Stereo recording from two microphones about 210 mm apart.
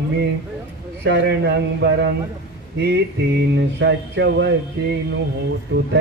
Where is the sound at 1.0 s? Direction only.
55° right (ahead or behind).